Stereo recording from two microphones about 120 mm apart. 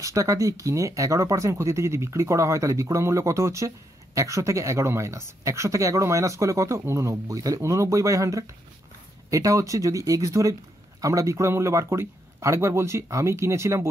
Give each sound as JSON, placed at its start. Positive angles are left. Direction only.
{"t": 0.0, "sound": "speech", "side_deg": -25}